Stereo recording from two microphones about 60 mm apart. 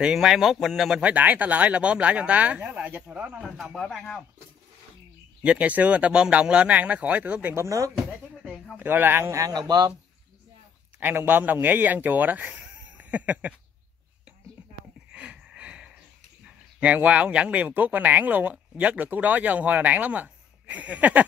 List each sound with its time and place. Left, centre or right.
0.0 s speech: centre
1.0 s speech: right
3.4 s speech: centre
5.4 s speech: right
7.5 s speech: right
8.7 s speech: right
9.3 s speech: right
11.0 s speech: right
15.1 s a sound: centre
16.8 s speech: right